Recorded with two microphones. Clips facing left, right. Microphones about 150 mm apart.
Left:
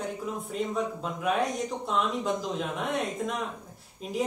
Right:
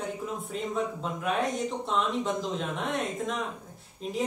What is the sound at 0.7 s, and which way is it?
Speech, centre (ahead or behind).